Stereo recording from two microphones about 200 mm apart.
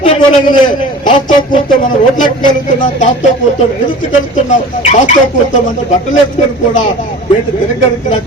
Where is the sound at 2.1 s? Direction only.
40° left (ahead or behind).